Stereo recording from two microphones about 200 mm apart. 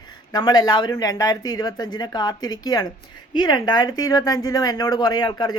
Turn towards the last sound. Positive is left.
turn(degrees=20)  # may be behind; listen again after turning